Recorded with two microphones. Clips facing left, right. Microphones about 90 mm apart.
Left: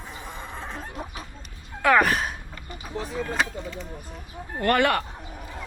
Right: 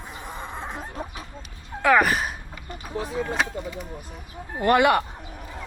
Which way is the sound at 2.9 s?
15° right (ahead or behind).